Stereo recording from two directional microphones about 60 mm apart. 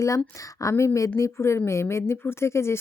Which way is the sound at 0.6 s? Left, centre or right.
Left.